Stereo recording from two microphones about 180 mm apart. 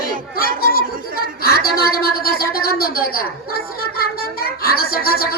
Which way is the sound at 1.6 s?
55° left (ahead or behind).